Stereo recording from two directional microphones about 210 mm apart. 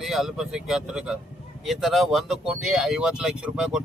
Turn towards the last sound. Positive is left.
turn(degrees=-5)  # may be behind; listen again after turning